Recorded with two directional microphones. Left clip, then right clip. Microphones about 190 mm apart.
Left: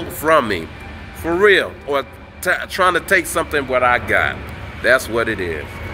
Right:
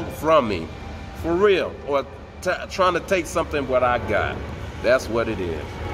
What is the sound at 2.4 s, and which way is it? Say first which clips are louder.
Speech: left 5 dB; centre (ahead or behind).